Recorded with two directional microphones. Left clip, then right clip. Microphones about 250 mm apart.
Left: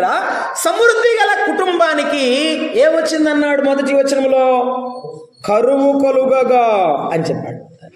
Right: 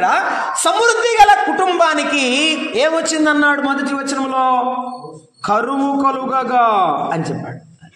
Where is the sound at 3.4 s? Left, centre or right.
Right.